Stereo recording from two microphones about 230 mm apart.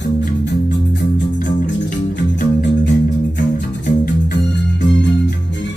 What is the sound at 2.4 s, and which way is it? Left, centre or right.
Music, left.